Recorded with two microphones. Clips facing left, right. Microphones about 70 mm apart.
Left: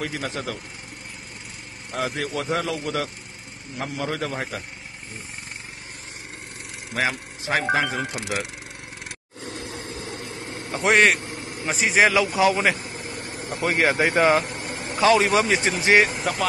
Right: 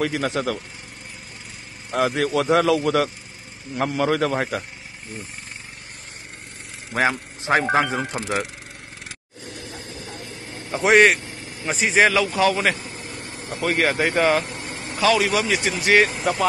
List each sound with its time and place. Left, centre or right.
0.1 s speech: right
2.0 s speech: right
6.9 s speech: right
10.8 s speech: centre
13.5 s speech: centre
14.8 s vehicle: left
15.0 s speech: left
16.1 s speech: centre